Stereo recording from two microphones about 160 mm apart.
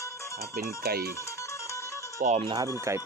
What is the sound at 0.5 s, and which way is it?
Speech, 75° right (ahead or behind).